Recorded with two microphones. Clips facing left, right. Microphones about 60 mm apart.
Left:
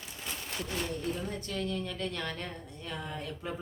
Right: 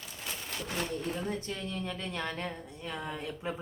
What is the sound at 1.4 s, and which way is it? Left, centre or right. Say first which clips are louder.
A woman's voice: left 2 dB; centre.